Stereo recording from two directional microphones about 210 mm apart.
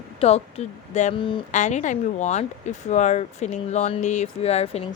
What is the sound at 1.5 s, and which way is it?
Speech, 35° left (ahead or behind).